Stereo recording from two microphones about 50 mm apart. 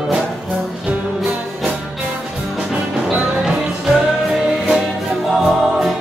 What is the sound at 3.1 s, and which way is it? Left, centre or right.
Music, right.